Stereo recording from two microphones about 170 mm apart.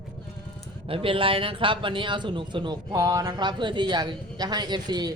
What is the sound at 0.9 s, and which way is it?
A man's voice, 30° right (ahead or behind).